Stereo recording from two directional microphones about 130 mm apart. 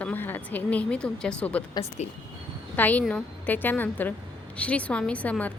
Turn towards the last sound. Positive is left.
turn(degrees=10)  # may be behind; listen again after turning